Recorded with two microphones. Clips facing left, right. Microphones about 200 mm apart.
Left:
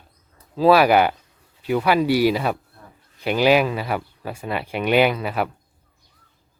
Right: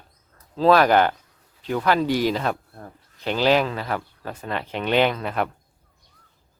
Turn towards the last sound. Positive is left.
turn(degrees=5)  # may be behind; listen again after turning